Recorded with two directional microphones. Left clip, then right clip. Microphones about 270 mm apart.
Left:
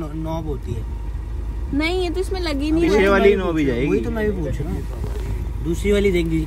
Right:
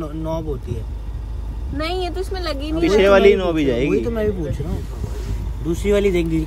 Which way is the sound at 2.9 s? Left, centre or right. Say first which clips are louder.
Right 4 dB; centre.